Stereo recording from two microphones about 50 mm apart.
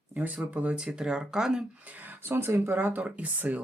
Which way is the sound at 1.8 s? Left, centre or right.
Right.